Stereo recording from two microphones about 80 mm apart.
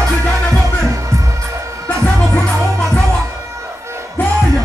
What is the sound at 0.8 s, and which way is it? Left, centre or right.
Music, right.